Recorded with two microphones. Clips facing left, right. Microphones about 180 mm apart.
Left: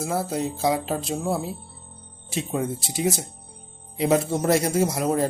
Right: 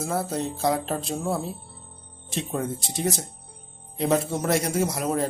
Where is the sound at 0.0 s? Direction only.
5° left (ahead or behind).